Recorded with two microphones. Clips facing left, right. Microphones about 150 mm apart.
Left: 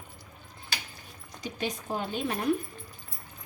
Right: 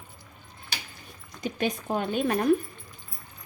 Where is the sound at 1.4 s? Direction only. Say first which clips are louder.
Right 5 dB; 55° right (ahead or behind).